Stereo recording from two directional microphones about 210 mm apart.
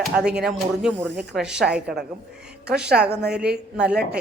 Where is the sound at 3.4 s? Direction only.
50° right (ahead or behind).